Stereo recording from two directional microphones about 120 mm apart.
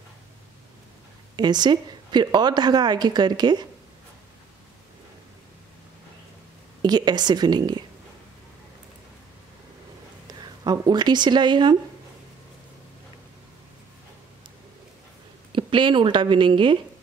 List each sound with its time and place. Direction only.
1.3 s a woman's voice: 35° right (ahead or behind)
6.8 s a woman's voice: 35° right (ahead or behind)
10.2 s speech: 35° right (ahead or behind)
15.5 s speech: 45° right (ahead or behind)